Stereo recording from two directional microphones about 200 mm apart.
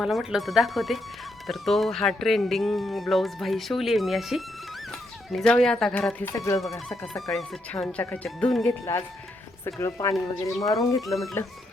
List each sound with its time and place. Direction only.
0.0 s speech: centre (ahead or behind); by 6.6 s 15° left (ahead or behind)
6.6 s speech: centre (ahead or behind)
8.8 s speech: 15° left (ahead or behind)
11.0 s speech: centre (ahead or behind)